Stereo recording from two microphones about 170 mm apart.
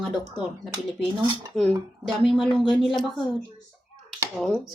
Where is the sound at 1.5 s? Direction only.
5° left (ahead or behind).